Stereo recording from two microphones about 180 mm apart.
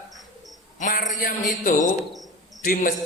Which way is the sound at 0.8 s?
45° left (ahead or behind).